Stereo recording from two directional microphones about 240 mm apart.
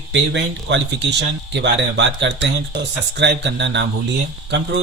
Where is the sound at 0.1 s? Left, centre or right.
Right.